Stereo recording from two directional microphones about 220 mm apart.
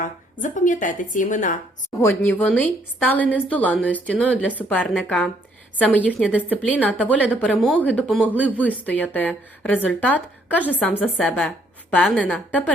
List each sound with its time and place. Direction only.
0.0 s a woman's voice: 35° left (ahead or behind)
2.0 s a woman's voice: 10° left (ahead or behind)
6.1 s a woman's voice: 5° right (ahead or behind)
6.6 s a woman's voice: 5° left (ahead or behind)
7.5 s a woman's voice: 5° right (ahead or behind)
7.8 s a woman's voice: 5° left (ahead or behind)